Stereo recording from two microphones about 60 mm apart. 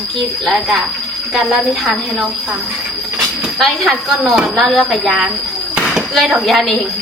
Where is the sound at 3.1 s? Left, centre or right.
Centre.